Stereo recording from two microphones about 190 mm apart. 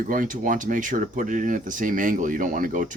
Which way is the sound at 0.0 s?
45° right (ahead or behind).